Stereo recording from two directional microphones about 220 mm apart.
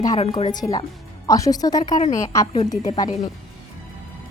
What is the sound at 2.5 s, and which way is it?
Speech, 30° left (ahead or behind).